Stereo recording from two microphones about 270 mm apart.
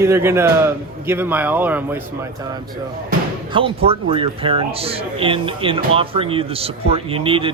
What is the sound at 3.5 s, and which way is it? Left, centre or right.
Speech, centre.